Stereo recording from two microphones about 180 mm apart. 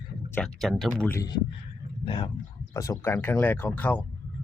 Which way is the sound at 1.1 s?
20° left (ahead or behind).